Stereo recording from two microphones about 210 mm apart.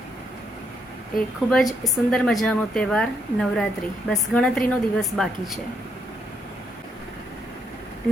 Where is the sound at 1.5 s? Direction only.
Centre (ahead or behind).